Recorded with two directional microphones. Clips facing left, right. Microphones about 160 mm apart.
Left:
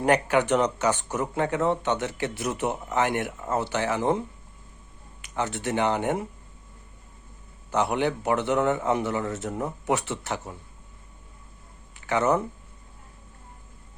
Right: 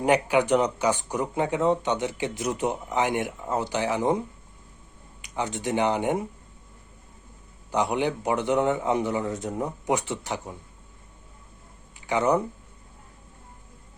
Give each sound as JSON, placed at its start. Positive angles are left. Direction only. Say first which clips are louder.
{"t": 0.0, "sound": "speech", "louder": "even", "side_deg": -10}
{"t": 5.2, "sound": "speech", "louder": "even", "side_deg": -15}
{"t": 7.7, "sound": "speech", "louder": "even", "side_deg": -15}
{"t": 11.9, "sound": "speech", "louder": "even", "side_deg": -15}